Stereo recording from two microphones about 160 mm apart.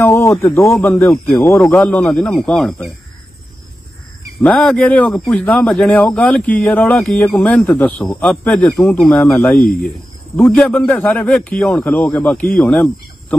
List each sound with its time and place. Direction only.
0.0 s a man's voice: 15° left (ahead or behind)
4.4 s speech: 10° left (ahead or behind)